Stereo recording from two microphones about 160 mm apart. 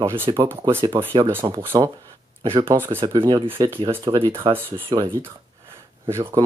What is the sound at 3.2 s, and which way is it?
Speech, 30° right (ahead or behind).